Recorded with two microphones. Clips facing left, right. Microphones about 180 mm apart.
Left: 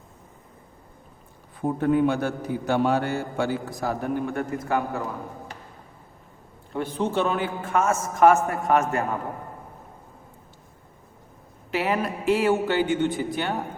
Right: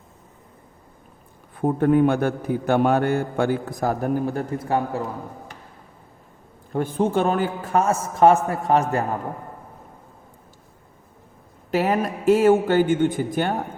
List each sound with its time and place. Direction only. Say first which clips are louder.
1.5 s a man's voice: right 4 dB; 55° right (ahead or behind); by 5.0 s 30° right (ahead or behind)
6.7 s a man's voice: right 4 dB; 50° right (ahead or behind); by 9.0 s 35° right (ahead or behind)
11.7 s speech: right 4 dB; 45° right (ahead or behind)